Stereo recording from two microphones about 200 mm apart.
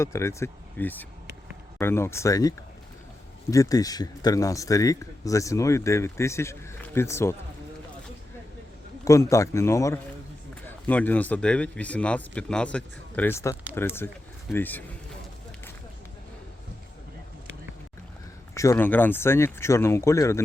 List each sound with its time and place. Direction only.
0.0 s speech: 15° left (ahead or behind)
9.0 s speech: 15° left (ahead or behind)
18.5 s speech: 15° left (ahead or behind)